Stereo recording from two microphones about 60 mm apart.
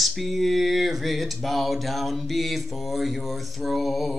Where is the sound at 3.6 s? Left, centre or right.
Centre.